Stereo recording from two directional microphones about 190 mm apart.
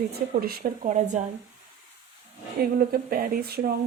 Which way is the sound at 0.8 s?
40° right (ahead or behind).